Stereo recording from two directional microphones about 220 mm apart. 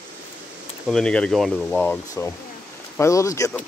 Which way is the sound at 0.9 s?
5° left (ahead or behind).